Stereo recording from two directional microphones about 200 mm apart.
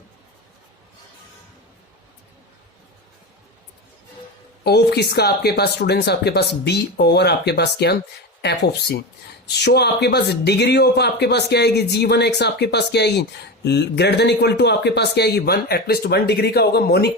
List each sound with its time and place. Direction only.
4.6 s speech: 55° left (ahead or behind)